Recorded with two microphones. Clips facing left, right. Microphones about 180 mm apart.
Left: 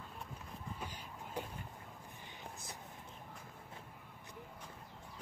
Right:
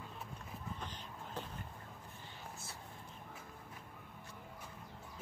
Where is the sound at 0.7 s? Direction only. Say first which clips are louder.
Even; 10° left (ahead or behind).